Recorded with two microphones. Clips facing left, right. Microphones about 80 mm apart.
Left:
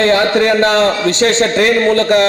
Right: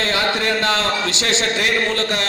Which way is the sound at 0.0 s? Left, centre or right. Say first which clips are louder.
Left 9 dB; left.